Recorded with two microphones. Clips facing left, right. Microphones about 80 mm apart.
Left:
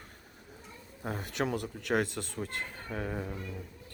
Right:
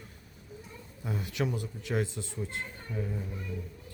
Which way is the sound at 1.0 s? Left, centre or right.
Left.